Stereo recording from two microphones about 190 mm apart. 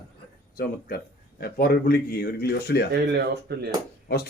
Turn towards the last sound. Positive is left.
turn(degrees=55)  # may be behind; listen again after turning